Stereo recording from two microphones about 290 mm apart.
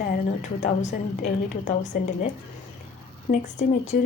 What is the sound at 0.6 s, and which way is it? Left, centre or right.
A woman's voice, left.